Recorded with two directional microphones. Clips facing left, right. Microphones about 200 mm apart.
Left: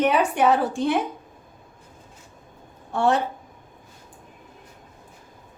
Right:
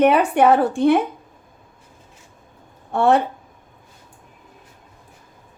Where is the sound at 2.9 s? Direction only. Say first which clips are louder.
Right 5 dB; 55° right (ahead or behind).